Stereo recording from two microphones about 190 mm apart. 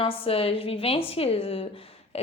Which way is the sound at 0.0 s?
30° left (ahead or behind).